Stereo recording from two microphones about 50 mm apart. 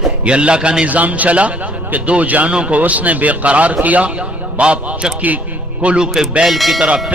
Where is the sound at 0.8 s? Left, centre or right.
Right.